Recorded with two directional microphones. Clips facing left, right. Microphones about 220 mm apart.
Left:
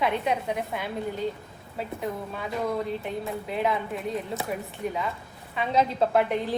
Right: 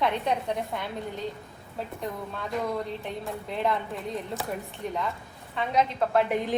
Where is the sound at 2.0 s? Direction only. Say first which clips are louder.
Left 2 dB; 5° left (ahead or behind).